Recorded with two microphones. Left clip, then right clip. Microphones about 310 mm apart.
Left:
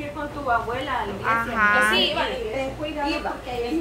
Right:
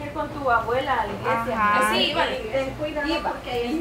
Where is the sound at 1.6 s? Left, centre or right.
Centre.